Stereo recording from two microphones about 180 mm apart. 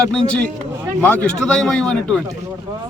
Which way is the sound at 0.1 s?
5° left (ahead or behind).